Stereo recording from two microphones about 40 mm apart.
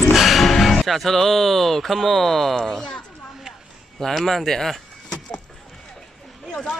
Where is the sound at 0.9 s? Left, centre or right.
Centre.